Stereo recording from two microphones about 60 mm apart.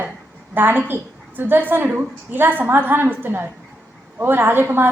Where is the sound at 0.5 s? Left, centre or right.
Right.